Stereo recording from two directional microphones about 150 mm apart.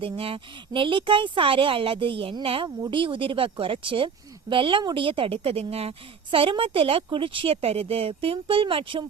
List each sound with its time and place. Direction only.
0.0 s speech: 40° right (ahead or behind)